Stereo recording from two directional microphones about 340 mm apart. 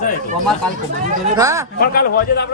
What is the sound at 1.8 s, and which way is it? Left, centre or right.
Speech, left.